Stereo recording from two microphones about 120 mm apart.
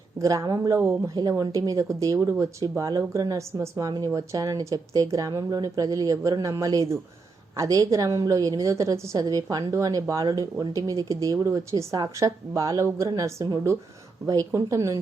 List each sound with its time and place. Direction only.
0.2 s a woman's voice: 25° right (ahead or behind)